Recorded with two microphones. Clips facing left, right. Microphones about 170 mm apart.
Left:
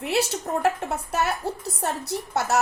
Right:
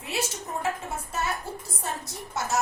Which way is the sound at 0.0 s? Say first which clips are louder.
Left 7 dB; 70° left (ahead or behind).